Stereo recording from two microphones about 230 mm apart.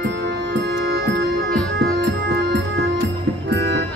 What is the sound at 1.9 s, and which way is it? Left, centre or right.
Music, right.